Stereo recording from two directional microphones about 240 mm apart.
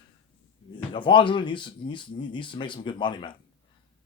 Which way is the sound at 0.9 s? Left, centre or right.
Left.